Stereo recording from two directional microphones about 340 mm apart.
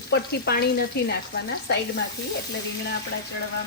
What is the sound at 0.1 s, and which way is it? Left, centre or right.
Speech, left.